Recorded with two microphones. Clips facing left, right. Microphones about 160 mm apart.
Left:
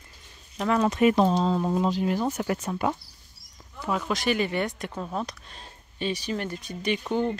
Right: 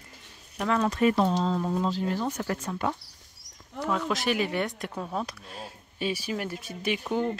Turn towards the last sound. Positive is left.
turn(degrees=0)  # may be behind; listen again after turning